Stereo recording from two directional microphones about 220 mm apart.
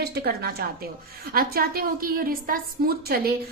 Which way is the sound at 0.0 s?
45° right (ahead or behind).